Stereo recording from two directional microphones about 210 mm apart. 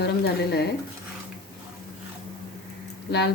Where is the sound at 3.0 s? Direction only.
55° left (ahead or behind).